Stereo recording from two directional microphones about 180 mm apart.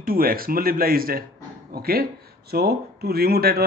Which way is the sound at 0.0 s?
55° right (ahead or behind).